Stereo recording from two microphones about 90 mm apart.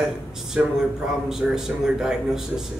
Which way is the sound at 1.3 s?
5° right (ahead or behind).